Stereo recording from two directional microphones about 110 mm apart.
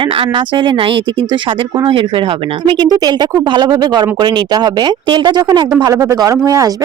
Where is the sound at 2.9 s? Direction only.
40° right (ahead or behind).